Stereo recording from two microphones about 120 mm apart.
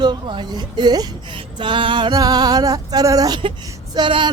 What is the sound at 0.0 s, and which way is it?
Music, 40° right (ahead or behind).